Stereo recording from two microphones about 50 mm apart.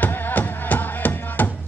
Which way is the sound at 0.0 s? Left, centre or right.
Left.